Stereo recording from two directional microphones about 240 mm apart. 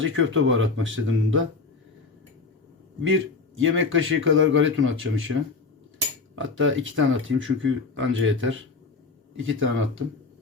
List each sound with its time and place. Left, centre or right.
0.0 s speech: right
3.0 s speech: right
6.3 s speech: right